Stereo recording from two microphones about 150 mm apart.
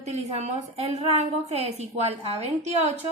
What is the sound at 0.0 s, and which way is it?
A woman's voice, 45° right (ahead or behind).